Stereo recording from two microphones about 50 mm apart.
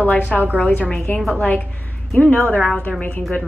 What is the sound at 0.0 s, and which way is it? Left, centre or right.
A woman's voice, left.